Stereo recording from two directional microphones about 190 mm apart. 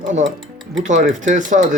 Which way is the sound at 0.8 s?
40° right (ahead or behind).